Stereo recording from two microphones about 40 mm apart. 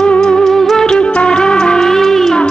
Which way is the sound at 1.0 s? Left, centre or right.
Left.